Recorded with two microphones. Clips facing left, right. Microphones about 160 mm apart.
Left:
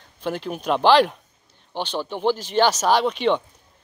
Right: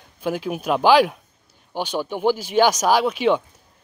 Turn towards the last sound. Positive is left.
turn(degrees=-5)  # may be behind; listen again after turning